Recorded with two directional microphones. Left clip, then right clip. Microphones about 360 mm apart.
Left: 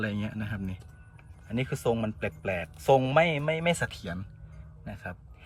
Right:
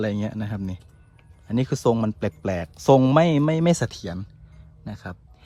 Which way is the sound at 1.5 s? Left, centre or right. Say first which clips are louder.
Right 7 dB; right.